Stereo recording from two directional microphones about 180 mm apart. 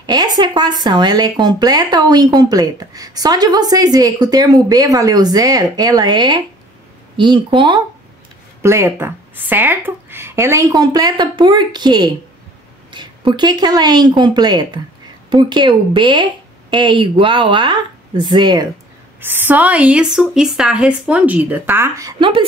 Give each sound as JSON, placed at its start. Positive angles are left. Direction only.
{"t": 0.0, "sound": "speech", "side_deg": -25}
{"t": 8.6, "sound": "a woman's voice", "side_deg": -15}
{"t": 19.2, "sound": "a woman's voice", "side_deg": -10}